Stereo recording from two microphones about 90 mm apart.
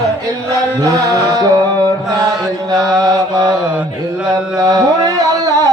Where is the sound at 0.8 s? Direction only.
45° right (ahead or behind).